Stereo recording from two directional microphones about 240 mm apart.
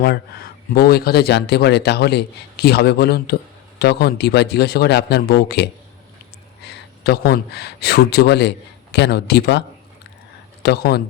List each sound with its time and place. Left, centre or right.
0.0 s a man's voice: left